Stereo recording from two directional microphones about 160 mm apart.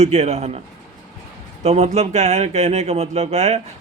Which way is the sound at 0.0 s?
40° right (ahead or behind).